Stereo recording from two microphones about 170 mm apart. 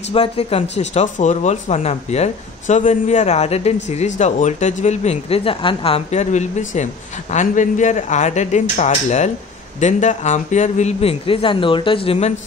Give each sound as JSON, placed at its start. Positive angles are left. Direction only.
{"t": 0.1, "sound": "a man's voice", "side_deg": 35}